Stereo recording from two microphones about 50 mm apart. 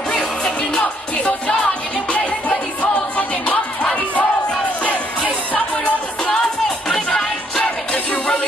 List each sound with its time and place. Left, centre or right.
0.1 s music: centre
2.8 s music: left
7.9 s music: left